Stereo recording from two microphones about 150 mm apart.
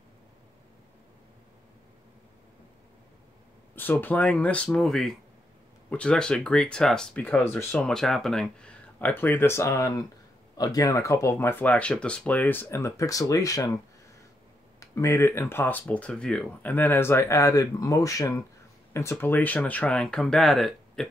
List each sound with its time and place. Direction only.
3.7 s speech: 15° left (ahead or behind)
14.8 s speech: 20° left (ahead or behind); by 21.1 s centre (ahead or behind)